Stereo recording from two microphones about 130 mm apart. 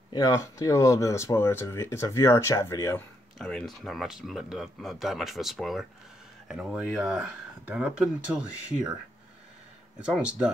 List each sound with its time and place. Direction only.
0.1 s speech: 30° left (ahead or behind)
3.3 s speech: centre (ahead or behind)
9.9 s speech: 10° right (ahead or behind)